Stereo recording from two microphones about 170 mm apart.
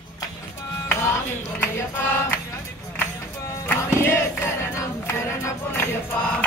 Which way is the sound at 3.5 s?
15° left (ahead or behind).